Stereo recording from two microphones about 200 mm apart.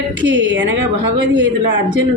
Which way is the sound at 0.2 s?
65° right (ahead or behind).